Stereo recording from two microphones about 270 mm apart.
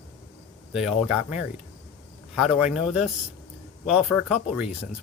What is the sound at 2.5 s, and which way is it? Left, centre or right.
Speech, centre.